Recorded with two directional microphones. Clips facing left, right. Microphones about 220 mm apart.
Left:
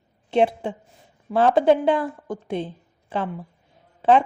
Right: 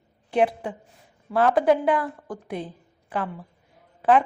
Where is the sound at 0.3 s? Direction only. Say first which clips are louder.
Left 2 dB; 25° left (ahead or behind).